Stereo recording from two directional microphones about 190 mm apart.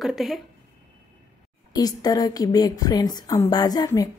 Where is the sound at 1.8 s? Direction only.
20° left (ahead or behind).